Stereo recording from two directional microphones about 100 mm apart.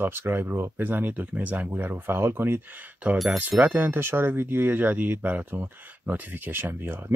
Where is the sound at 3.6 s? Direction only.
20° right (ahead or behind).